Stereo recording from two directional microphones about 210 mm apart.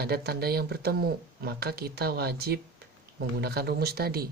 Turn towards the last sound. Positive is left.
turn(degrees=-50)  # may be behind; listen again after turning